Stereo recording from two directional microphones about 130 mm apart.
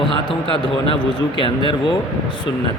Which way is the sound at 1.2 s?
40° left (ahead or behind).